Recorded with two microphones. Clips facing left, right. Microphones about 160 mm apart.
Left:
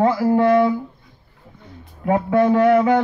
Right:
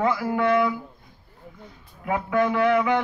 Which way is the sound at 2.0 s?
35° left (ahead or behind).